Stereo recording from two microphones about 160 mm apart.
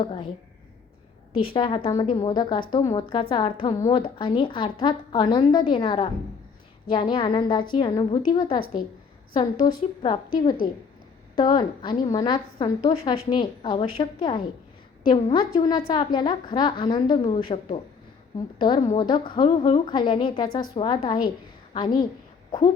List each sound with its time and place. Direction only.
0.0 s a woman's voice: 30° left (ahead or behind)
1.5 s a woman's voice: 35° left (ahead or behind)
18.9 s a woman's voice: 30° left (ahead or behind)